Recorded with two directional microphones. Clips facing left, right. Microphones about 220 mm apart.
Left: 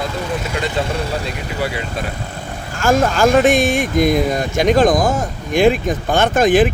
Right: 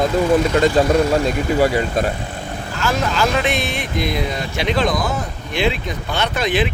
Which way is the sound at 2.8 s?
50° left (ahead or behind).